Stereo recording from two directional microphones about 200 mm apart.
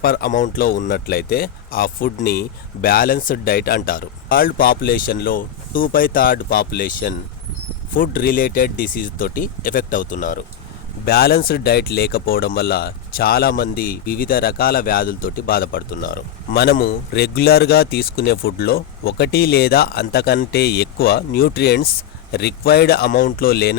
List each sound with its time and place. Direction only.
0.0 s speech: 45° left (ahead or behind)